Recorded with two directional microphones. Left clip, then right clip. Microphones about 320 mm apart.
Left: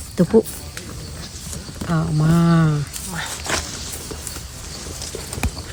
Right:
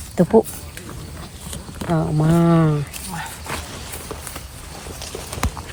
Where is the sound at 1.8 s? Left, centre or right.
Centre.